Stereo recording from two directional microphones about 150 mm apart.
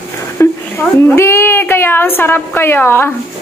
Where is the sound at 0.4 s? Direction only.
15° left (ahead or behind).